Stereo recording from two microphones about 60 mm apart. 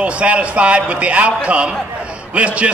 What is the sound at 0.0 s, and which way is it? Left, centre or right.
A man's voice, right.